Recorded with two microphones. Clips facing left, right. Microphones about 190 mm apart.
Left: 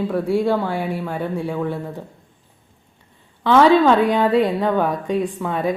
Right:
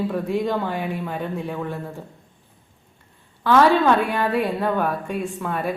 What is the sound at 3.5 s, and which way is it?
Speech, 15° left (ahead or behind).